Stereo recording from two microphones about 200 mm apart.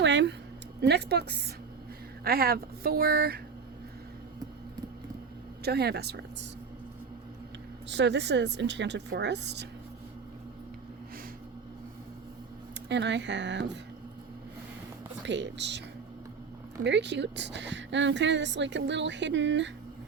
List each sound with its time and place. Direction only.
0.0 s a sound: 65° right (ahead or behind)
0.8 s a woman's voice: 55° right (ahead or behind)
5.6 s a woman's voice: 55° right (ahead or behind)
7.9 s a woman's voice: 60° right (ahead or behind)
12.9 s a woman's voice: 60° right (ahead or behind)
15.2 s a woman's voice: 65° right (ahead or behind)
16.8 s a woman's voice: 60° right (ahead or behind)